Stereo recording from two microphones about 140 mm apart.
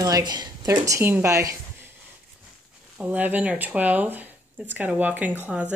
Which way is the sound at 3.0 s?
10° right (ahead or behind).